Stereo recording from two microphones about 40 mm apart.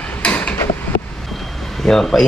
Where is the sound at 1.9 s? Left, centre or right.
Centre.